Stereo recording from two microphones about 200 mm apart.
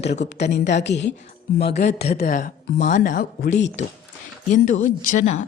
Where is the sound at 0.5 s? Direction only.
60° left (ahead or behind).